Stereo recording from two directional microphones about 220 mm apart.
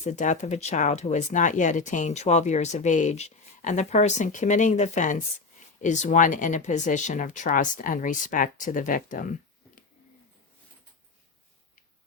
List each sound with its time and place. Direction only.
0.0 s speech: 35° left (ahead or behind)